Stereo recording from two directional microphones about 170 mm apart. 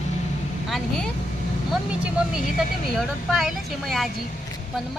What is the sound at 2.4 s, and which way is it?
Speech, 50° left (ahead or behind).